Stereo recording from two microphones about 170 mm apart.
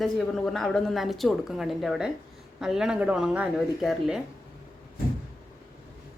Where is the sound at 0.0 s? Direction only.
Centre (ahead or behind).